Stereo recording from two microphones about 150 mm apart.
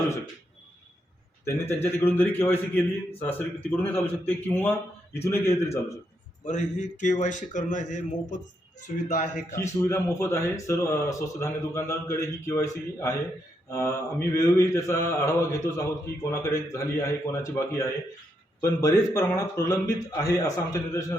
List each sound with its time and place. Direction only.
1.5 s a man's voice: 15° left (ahead or behind)
6.4 s speech: 55° left (ahead or behind)
9.6 s speech: 20° left (ahead or behind)